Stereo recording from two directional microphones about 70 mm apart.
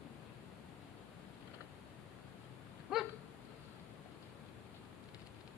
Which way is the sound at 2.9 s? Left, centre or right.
Centre.